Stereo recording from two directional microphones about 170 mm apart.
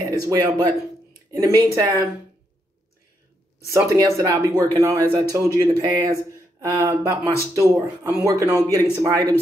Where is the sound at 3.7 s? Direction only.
15° right (ahead or behind).